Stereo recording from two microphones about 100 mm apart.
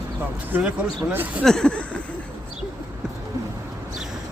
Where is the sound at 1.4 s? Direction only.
5° left (ahead or behind).